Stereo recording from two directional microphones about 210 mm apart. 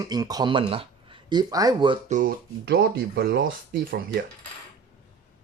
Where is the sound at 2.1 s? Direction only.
40° right (ahead or behind).